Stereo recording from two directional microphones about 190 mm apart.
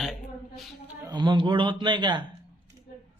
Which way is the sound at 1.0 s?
20° right (ahead or behind).